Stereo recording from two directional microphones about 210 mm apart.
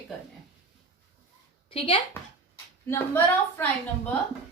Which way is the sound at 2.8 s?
10° left (ahead or behind).